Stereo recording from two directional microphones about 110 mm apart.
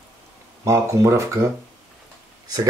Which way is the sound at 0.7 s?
25° right (ahead or behind).